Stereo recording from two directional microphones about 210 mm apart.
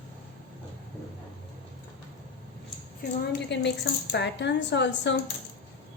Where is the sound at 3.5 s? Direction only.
55° left (ahead or behind).